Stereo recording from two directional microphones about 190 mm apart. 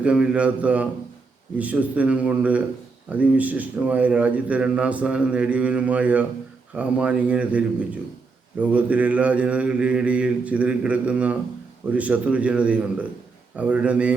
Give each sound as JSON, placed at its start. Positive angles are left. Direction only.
{"t": 0.0, "sound": "a man's voice", "side_deg": -5}